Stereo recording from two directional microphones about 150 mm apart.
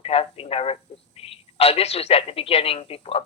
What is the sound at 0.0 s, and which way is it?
A man's voice, 40° left (ahead or behind).